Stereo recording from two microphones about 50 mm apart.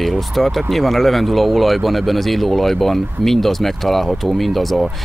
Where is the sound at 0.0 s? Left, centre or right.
Centre.